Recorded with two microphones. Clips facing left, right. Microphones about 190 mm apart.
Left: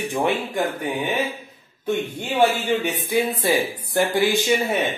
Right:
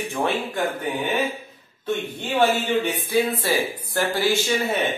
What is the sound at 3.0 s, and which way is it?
Speech, 15° left (ahead or behind).